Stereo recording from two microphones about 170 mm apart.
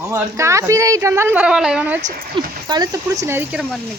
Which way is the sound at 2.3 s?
25° right (ahead or behind).